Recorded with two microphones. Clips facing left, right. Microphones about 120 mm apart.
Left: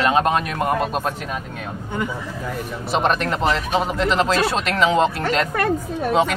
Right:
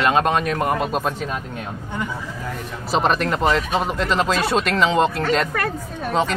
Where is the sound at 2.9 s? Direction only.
Centre (ahead or behind).